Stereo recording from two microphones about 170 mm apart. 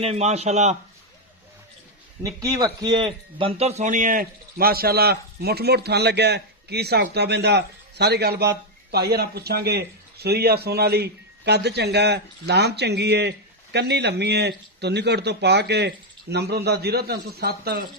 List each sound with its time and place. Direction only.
0.0 s a man's voice: 40° right (ahead or behind)
2.2 s a man's voice: 20° right (ahead or behind); by 17.8 s 65° right (ahead or behind)